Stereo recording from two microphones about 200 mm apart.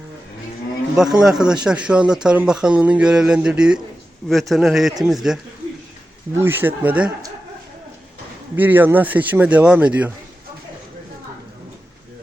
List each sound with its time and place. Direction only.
1.2 s speech: 5° right (ahead or behind)
6.4 s a man's voice: 10° right (ahead or behind)
8.5 s a man's voice: 10° right (ahead or behind)